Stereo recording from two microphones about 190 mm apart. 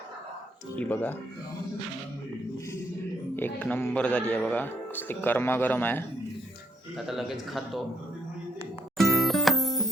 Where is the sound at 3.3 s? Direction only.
10° left (ahead or behind).